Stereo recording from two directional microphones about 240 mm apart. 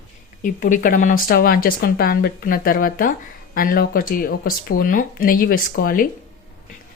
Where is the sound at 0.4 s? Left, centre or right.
Left.